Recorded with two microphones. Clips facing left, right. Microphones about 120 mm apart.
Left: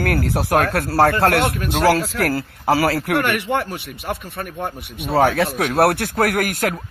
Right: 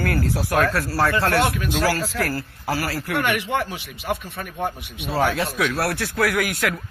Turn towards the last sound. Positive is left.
turn(degrees=40)  # may be behind; listen again after turning